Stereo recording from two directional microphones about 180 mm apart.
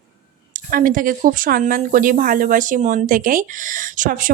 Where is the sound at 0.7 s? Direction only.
50° right (ahead or behind).